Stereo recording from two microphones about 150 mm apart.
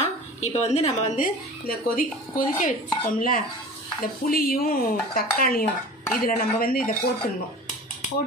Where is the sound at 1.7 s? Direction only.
70° left (ahead or behind).